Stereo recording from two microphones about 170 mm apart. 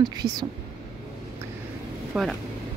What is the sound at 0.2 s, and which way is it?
Speech, 25° right (ahead or behind).